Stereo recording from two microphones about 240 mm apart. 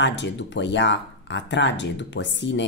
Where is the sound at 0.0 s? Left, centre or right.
Left.